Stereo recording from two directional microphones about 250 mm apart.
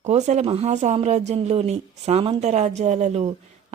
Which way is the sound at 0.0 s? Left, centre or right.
Right.